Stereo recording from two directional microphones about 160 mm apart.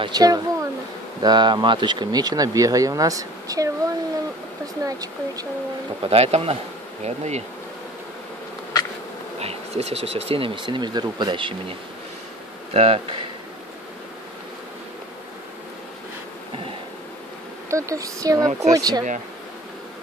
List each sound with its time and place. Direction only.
0.0 s speech: 25° right (ahead or behind)
4.8 s speech: 20° right (ahead or behind)
6.0 s speech: 40° right (ahead or behind)
7.1 s bee: 45° right (ahead or behind)
9.4 s speech: 40° right (ahead or behind)
12.7 s speech: 35° right (ahead or behind)
17.6 s speech: 20° right (ahead or behind)